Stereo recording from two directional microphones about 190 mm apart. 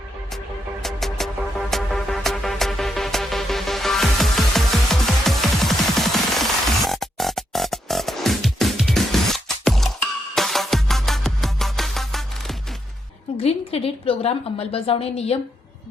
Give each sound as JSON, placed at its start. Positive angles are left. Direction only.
{"t": 0.8, "sound": "music", "side_deg": 0}
{"t": 13.3, "sound": "a woman's voice", "side_deg": 30}